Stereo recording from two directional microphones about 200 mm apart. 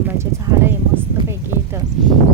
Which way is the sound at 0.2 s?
15° right (ahead or behind).